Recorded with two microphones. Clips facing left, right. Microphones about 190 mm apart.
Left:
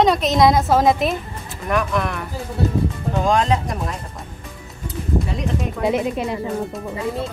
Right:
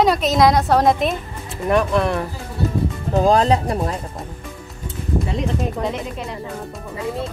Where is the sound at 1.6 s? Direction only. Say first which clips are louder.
Right 4 dB; 30° right (ahead or behind).